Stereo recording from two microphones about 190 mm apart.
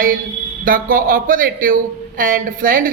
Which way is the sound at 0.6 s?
50° right (ahead or behind).